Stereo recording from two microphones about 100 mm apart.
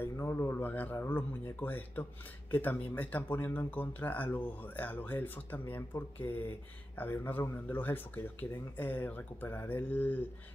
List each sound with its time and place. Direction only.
0.0 s speech: 25° left (ahead or behind)